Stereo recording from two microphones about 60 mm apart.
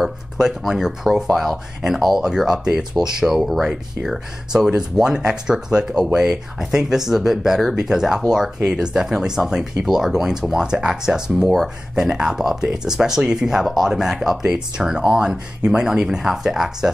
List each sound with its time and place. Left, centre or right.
0.4 s speech: centre